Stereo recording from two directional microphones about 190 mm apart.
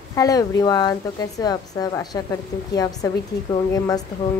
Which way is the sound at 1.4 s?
20° left (ahead or behind).